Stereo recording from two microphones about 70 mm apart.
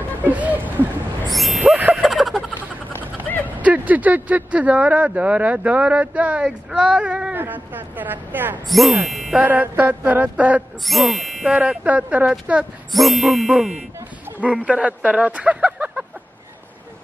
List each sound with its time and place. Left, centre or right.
0.2 s a sound: right
1.3 s a sound: centre
1.8 s a sound: right
2.0 s a sound: centre
3.4 s speech: right
7.3 s speech: right
8.6 s speech: centre
9.4 s speech: right
10.9 s speech: centre
11.5 s speech: centre
12.9 s speech: centre
14.4 s speech: centre